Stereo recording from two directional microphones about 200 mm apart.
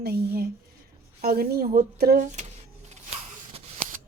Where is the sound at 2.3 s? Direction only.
35° right (ahead or behind).